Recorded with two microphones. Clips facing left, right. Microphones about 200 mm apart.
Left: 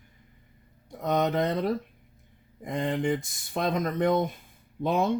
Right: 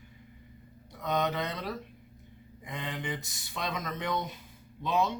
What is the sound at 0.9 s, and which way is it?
Speech, 50° left (ahead or behind).